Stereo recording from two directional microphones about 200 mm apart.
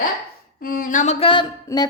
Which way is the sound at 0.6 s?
45° left (ahead or behind).